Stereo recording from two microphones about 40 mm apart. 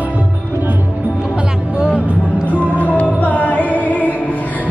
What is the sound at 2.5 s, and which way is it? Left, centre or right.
Music, left.